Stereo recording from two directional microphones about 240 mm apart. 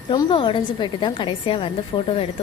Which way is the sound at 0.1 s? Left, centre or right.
Centre.